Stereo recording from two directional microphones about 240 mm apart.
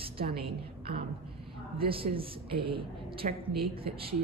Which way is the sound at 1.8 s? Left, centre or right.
Right.